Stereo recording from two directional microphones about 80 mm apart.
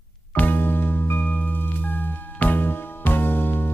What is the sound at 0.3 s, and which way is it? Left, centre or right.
Music, left.